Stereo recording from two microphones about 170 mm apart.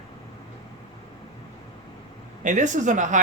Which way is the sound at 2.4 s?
45° right (ahead or behind).